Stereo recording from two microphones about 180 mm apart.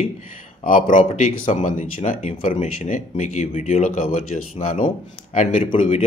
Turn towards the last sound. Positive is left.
turn(degrees=40)  # may be behind; listen again after turning